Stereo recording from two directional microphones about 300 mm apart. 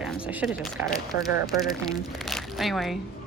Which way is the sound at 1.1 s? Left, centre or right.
Left.